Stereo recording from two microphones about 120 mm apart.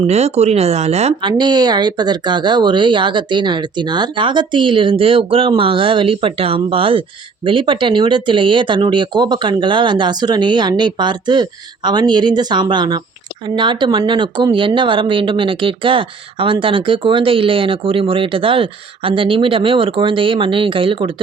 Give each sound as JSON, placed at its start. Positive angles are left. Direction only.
{"t": 0.0, "sound": "speech", "side_deg": -65}
{"t": 1.2, "sound": "speech", "side_deg": -40}